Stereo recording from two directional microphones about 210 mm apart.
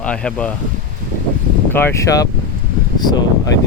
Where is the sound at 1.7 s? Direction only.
10° left (ahead or behind).